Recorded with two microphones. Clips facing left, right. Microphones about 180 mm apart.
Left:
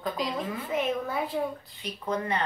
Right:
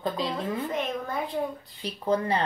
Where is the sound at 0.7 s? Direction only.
5° left (ahead or behind).